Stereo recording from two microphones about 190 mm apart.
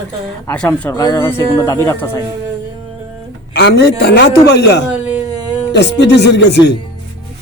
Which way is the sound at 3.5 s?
65° left (ahead or behind).